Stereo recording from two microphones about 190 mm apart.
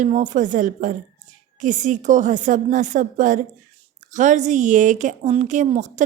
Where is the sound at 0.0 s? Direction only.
40° right (ahead or behind).